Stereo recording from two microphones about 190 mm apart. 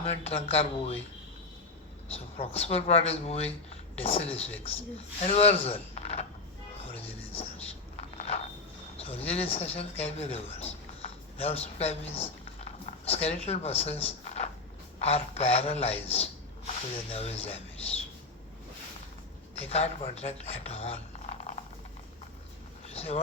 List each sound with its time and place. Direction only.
0.0 s speech: 30° left (ahead or behind)
2.0 s speech: 30° left (ahead or behind)
7.9 s a sound: 35° left (ahead or behind)
9.0 s speech: 30° left (ahead or behind)
19.5 s speech: 35° left (ahead or behind)
22.9 s vehicle: 35° left (ahead or behind)